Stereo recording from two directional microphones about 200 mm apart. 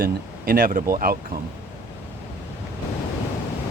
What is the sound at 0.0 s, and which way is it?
Speech, 45° right (ahead or behind).